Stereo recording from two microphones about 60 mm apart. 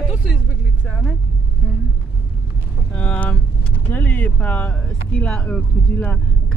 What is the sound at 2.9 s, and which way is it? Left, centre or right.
Speech, left.